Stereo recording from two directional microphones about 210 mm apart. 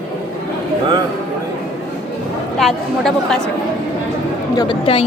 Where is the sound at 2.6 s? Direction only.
Centre (ahead or behind).